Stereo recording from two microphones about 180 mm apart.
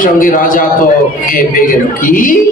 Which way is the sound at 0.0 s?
50° left (ahead or behind).